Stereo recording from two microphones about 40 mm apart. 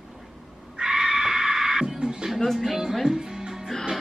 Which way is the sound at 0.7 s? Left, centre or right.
Centre.